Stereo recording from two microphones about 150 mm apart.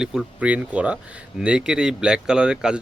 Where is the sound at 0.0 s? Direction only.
5° right (ahead or behind).